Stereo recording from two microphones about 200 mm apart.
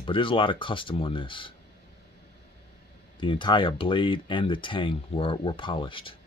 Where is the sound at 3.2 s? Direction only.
25° left (ahead or behind).